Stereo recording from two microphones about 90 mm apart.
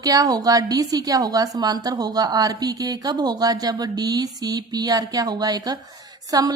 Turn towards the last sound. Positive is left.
turn(degrees=-45)  # may be behind; listen again after turning